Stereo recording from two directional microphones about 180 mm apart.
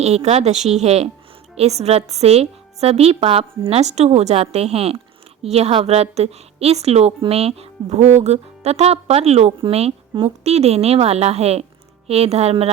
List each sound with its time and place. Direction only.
0.0 s a woman's voice: 35° right (ahead or behind)